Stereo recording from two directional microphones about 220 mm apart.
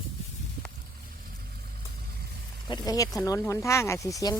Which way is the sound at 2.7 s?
20° left (ahead or behind).